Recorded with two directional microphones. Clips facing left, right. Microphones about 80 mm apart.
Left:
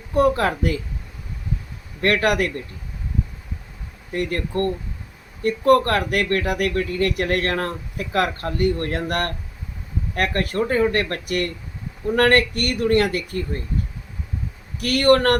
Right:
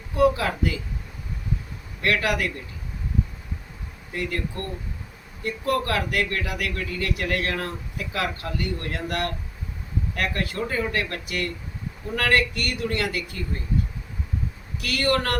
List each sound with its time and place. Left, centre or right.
0.1 s speech: left
2.0 s speech: left
4.1 s speech: left
14.8 s speech: left